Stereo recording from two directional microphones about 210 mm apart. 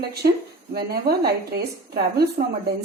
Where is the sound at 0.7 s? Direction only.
50° right (ahead or behind).